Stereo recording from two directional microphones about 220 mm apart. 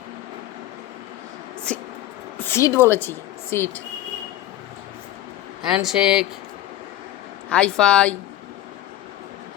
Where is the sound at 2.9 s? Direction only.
10° left (ahead or behind).